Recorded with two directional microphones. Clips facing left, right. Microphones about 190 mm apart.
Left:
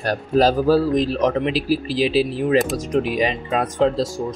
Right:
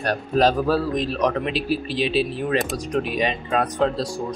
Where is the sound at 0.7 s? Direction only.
30° left (ahead or behind).